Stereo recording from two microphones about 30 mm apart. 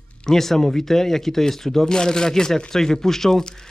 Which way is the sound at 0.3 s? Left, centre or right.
Centre.